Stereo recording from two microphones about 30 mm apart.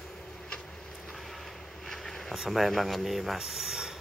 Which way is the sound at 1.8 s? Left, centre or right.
Centre.